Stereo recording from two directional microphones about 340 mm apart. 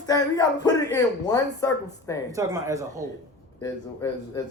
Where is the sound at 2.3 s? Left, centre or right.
Centre.